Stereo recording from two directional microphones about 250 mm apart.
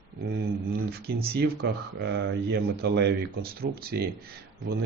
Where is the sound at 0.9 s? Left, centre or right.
Right.